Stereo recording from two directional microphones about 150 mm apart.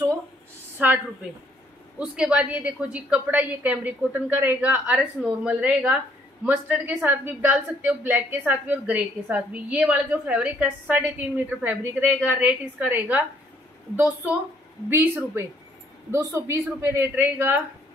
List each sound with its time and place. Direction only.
0.8 s a woman's voice: 10° right (ahead or behind)